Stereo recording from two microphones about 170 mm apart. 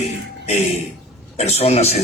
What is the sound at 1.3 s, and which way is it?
Speech, 40° left (ahead or behind).